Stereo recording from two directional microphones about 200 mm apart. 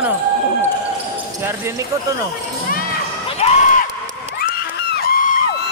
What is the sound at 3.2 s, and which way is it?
Basketball bounce, 35° left (ahead or behind).